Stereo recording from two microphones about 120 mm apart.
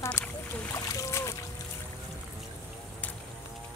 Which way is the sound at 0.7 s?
25° left (ahead or behind).